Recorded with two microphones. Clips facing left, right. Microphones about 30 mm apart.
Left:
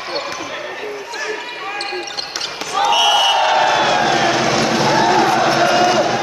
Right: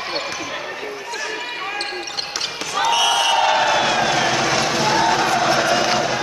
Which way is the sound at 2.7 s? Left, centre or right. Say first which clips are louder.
Left 4 dB; centre.